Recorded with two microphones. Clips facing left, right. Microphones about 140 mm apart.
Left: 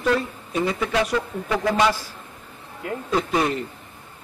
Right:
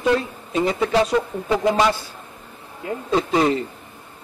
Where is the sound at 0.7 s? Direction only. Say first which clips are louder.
Right 5 dB; 30° right (ahead or behind).